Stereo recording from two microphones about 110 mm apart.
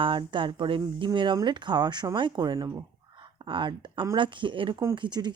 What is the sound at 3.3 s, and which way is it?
Speech, 45° right (ahead or behind).